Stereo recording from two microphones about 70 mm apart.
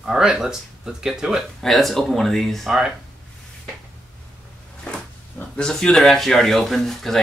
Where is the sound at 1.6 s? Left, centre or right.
Centre.